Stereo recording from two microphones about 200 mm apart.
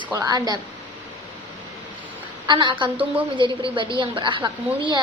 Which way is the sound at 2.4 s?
20° right (ahead or behind).